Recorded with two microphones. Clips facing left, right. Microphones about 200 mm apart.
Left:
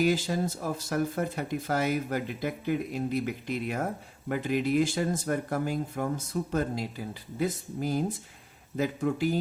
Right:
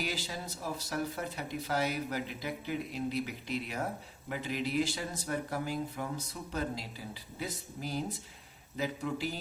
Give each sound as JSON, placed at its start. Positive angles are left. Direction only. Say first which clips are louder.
{"t": 0.0, "sound": "speech", "louder": "left 12 dB", "side_deg": 50}